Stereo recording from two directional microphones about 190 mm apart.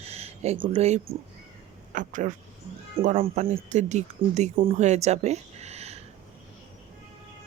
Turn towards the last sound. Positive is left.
turn(degrees=-35)  # may be behind; listen again after turning